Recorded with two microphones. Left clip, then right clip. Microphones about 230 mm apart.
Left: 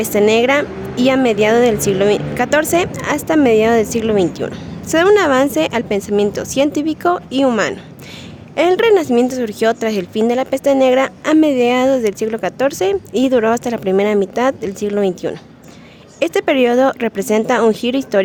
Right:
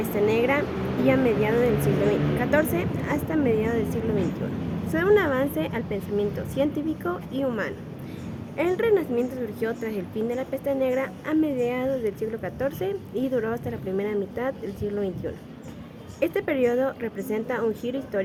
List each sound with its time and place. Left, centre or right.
0.0 s speech: left